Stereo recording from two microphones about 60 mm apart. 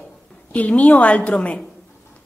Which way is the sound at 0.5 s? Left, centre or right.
Left.